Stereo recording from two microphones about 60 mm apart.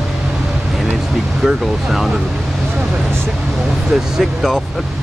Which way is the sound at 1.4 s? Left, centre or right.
Centre.